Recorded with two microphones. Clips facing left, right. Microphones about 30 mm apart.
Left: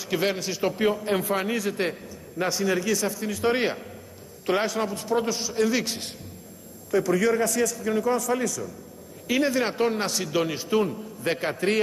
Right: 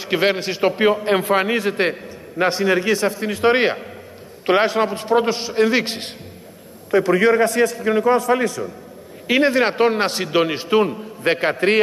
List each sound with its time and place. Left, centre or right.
0.0 s a man's voice: right